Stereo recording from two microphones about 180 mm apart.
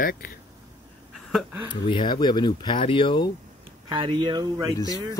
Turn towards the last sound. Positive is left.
turn(degrees=20)  # may be behind; listen again after turning